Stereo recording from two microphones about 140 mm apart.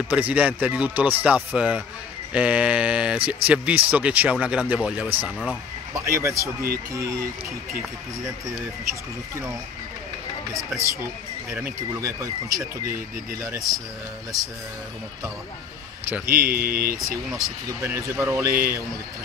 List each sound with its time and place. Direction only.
0.1 s speech: 10° right (ahead or behind)
5.9 s speech: 20° right (ahead or behind)
10.8 s speech: 20° right (ahead or behind)
16.3 s speech: 90° right
17.8 s speech: 15° right (ahead or behind)